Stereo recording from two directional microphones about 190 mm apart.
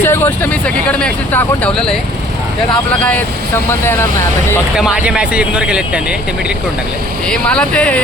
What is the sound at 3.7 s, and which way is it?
Speech, 15° left (ahead or behind).